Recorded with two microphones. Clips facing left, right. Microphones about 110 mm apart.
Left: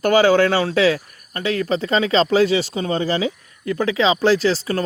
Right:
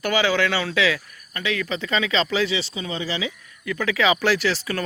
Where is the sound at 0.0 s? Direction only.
45° left (ahead or behind).